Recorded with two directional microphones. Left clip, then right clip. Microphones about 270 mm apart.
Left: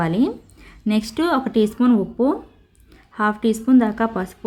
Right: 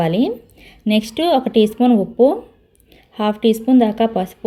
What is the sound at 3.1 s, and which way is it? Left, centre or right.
A woman's voice, left.